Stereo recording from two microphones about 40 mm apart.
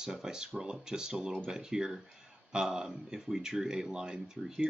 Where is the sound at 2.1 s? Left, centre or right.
Centre.